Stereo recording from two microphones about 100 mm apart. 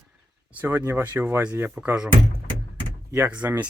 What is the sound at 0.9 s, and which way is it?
Speech, 20° right (ahead or behind).